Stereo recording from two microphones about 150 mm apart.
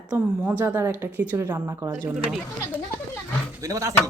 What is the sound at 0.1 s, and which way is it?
A woman's voice, 10° right (ahead or behind).